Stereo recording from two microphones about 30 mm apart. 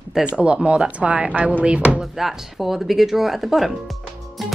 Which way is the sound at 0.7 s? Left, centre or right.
Right.